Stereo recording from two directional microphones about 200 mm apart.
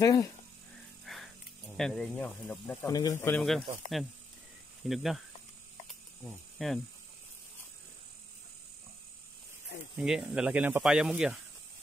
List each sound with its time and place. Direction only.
0.0 s speech: 15° left (ahead or behind)
1.0 s music: centre (ahead or behind)
1.8 s speech: 5° left (ahead or behind)
2.8 s speech: 20° left (ahead or behind)
4.8 s speech: centre (ahead or behind)
5.9 s cricket: centre (ahead or behind)
10.0 s speech: 5° right (ahead or behind)